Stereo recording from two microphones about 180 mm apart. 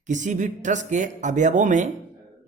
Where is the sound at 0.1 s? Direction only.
45° right (ahead or behind).